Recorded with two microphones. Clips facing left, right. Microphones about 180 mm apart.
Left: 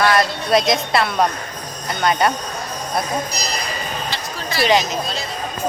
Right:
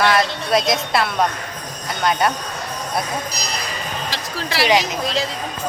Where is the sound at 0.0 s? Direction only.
Centre (ahead or behind).